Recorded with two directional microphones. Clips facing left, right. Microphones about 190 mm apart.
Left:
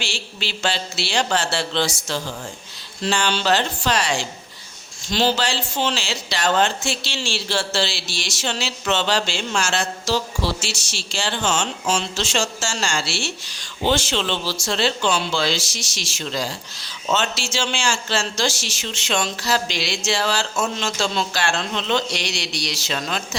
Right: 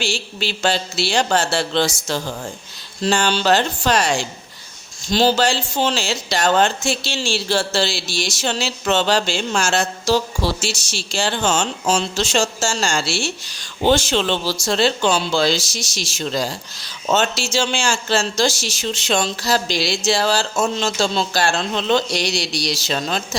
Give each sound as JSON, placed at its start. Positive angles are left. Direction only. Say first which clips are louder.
{"t": 0.0, "sound": "speech", "louder": "right 6 dB", "side_deg": -40}